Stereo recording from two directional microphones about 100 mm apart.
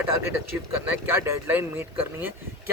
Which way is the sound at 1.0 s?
25° right (ahead or behind).